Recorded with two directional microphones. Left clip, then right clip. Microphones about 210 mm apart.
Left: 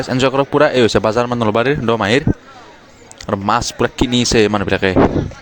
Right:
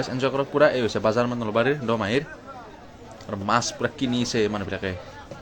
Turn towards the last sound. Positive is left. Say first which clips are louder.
# left 13 dB
turn(degrees=50)  # may be behind; listen again after turning